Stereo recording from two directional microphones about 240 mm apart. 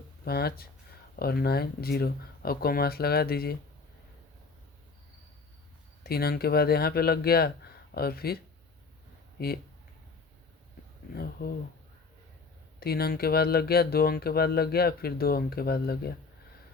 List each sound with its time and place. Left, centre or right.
0.3 s speech: left
6.0 s speech: left
11.1 s speech: left
12.8 s speech: left